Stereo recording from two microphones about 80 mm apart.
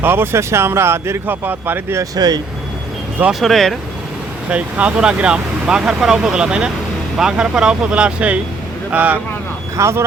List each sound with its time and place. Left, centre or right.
0.0 s speech: right
2.1 s speech: right
3.4 s speech: centre
4.4 s speech: centre
9.7 s speech: right